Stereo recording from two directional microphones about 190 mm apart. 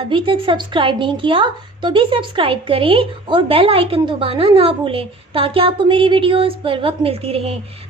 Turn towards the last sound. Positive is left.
turn(degrees=-30)  # may be behind; listen again after turning